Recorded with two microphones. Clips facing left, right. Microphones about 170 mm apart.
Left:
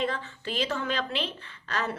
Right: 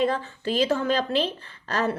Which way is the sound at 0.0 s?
40° right (ahead or behind).